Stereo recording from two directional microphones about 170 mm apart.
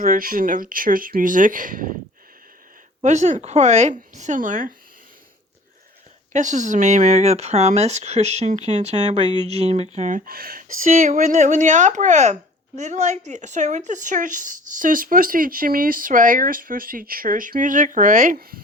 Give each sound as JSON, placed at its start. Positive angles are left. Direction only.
{"t": 0.0, "sound": "speech", "side_deg": -55}
{"t": 3.0, "sound": "speech", "side_deg": -45}
{"t": 6.3, "sound": "speech", "side_deg": -45}